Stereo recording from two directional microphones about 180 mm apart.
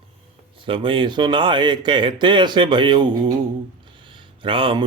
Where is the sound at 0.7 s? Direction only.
25° right (ahead or behind).